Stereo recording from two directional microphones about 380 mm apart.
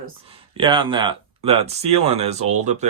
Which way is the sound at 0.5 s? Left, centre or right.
Centre.